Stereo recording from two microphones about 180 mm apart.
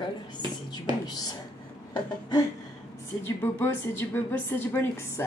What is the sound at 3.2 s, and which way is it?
A woman's voice, 10° left (ahead or behind).